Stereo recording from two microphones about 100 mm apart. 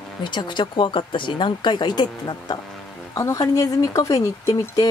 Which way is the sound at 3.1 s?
35° left (ahead or behind).